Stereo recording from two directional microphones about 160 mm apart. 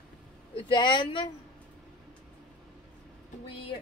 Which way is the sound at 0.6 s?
30° left (ahead or behind).